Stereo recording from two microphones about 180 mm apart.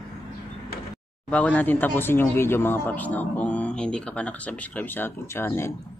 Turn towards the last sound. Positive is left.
turn(degrees=15)  # may be behind; listen again after turning